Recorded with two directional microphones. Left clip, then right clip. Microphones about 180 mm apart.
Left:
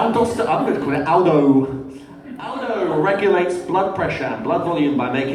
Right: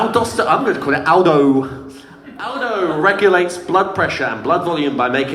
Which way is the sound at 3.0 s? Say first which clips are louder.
Right 6 dB; 35° right (ahead or behind).